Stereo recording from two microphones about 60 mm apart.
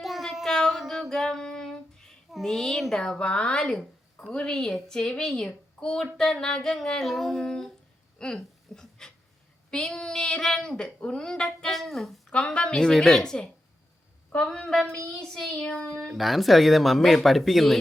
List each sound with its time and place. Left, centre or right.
0.0 s child singing: centre
1.1 s a sound: centre
2.3 s a child's voice: centre
8.2 s a sound: centre
9.6 s a woman's voice: centre
12.3 s a woman's voice: centre
14.7 s a woman's voice: centre
15.6 s child singing: left
16.0 s speech: centre